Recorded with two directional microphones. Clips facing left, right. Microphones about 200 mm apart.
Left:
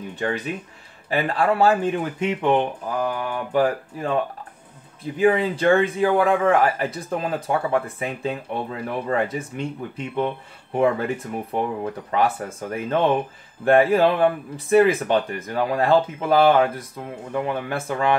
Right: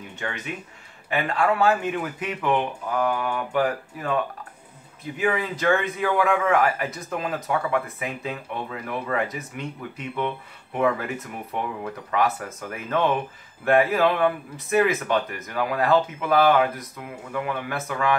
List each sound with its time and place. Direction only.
0.2 s a man's voice: 35° left (ahead or behind)
5.2 s a man's voice: 30° left (ahead or behind)